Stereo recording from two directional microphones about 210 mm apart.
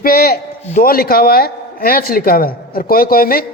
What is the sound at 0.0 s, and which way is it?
Speech, 45° left (ahead or behind).